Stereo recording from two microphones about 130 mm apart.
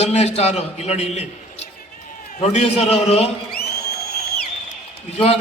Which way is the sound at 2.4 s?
55° left (ahead or behind).